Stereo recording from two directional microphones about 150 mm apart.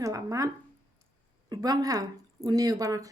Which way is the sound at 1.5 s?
25° right (ahead or behind).